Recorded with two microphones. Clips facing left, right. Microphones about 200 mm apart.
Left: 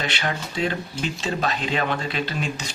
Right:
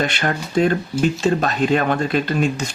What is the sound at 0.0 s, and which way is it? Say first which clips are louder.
Speech: right 6 dB; 50° right (ahead or behind).